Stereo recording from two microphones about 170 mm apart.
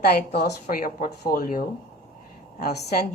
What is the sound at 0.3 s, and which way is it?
Speech, 60° left (ahead or behind).